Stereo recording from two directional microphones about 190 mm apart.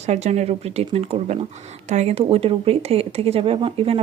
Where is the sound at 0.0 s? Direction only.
35° right (ahead or behind).